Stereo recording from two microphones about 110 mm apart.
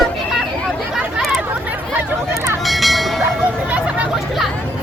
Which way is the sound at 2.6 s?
Centre (ahead or behind).